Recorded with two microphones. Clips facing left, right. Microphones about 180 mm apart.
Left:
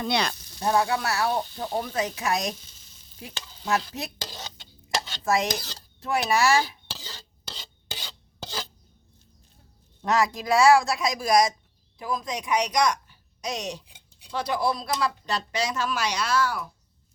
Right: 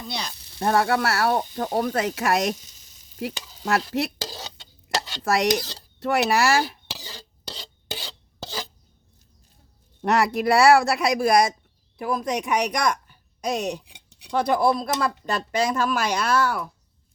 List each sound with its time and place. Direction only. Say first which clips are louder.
0.0 s speech: left 7 dB; 70° left (ahead or behind)
0.6 s speech: right 3 dB; 60° right (ahead or behind)
1.7 s speech: right 4 dB; 65° right (ahead or behind)
3.3 s stir: right 1 dB; 10° right (ahead or behind)
3.6 s speech: right 4 dB; 65° right (ahead or behind)
4.9 s dishes: right 2 dB; 70° right (ahead or behind)
6.0 s speech: right 3 dB; 70° right (ahead or behind)
6.9 s stir: right 2 dB; 15° right (ahead or behind)
7.4 s filing: right 5 dB; 35° right (ahead or behind)
10.0 s a woman's voice: right 3 dB; 65° right (ahead or behind)
14.3 s speech: right 6 dB; 55° right (ahead or behind)